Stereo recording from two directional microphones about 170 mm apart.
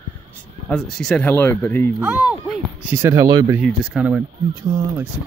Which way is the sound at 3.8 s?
5° right (ahead or behind).